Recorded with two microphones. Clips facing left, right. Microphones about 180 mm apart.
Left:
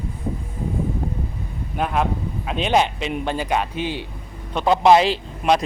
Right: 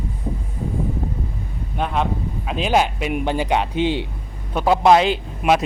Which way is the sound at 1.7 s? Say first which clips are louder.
Even; 5° left (ahead or behind).